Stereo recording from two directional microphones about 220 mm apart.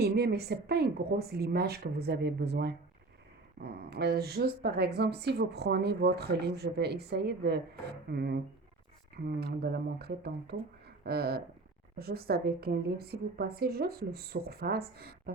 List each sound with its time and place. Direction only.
0.0 s speech: 45° right (ahead or behind)